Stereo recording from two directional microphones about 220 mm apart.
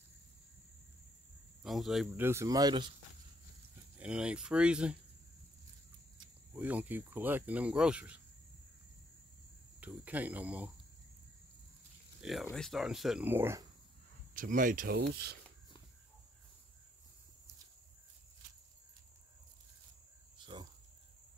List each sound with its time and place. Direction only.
1.6 s speech: centre (ahead or behind); by 2.9 s 20° right (ahead or behind)
4.0 s speech: 5° right (ahead or behind)
6.5 s speech: 5° right (ahead or behind)
9.8 s speech: 5° right (ahead or behind)
12.2 s speech: centre (ahead or behind)
14.3 s speech: 35° right (ahead or behind)
20.3 s cricket: 20° right (ahead or behind)